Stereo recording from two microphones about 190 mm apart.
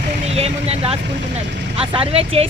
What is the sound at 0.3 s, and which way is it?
Speech, 30° right (ahead or behind).